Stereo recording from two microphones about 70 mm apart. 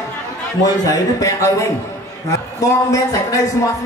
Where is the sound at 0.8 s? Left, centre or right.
Left.